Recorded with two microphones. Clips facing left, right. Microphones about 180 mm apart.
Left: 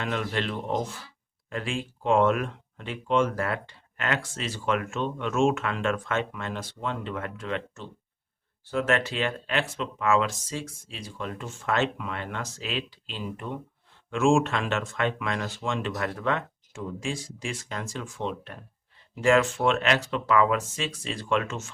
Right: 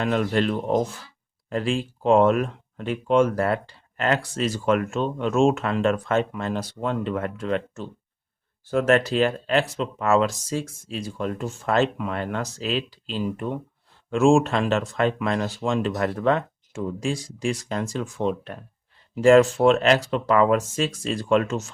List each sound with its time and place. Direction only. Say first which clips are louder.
0.0 s speech: right 7 dB; 40° right (ahead or behind)